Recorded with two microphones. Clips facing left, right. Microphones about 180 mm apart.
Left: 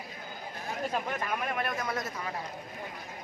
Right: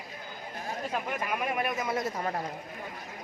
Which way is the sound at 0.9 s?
10° right (ahead or behind).